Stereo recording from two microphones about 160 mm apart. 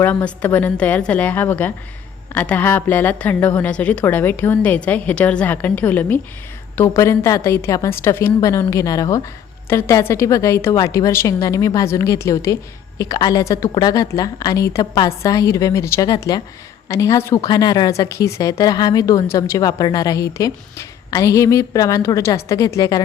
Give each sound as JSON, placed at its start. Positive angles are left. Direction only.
{"t": 0.0, "sound": "a woman's voice", "side_deg": 10}